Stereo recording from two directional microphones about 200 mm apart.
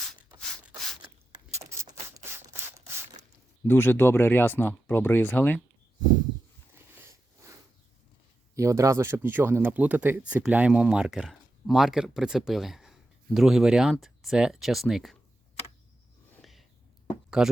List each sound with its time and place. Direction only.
1.5 s a sound: 15° right (ahead or behind)
2.6 s sanding: 10° right (ahead or behind)
3.6 s speech: 10° left (ahead or behind)
8.5 s speech: 15° right (ahead or behind)
16.4 s a sound: centre (ahead or behind)
17.4 s speech: 5° right (ahead or behind)